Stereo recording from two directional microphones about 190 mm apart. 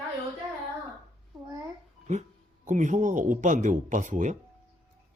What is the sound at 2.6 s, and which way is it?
Speech, 40° right (ahead or behind).